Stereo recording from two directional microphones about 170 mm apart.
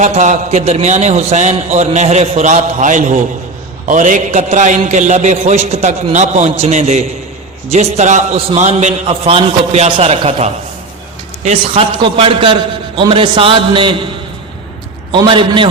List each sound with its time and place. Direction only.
0.0 s a man's voice: 45° right (ahead or behind)
12.0 s a man's voice: 30° right (ahead or behind)
15.1 s a man's voice: 30° right (ahead or behind)